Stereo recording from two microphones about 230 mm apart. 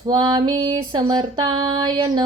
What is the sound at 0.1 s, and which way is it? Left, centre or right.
Female singing, right.